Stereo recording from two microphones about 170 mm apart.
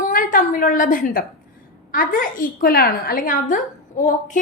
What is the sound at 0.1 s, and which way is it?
A woman's voice, 50° left (ahead or behind).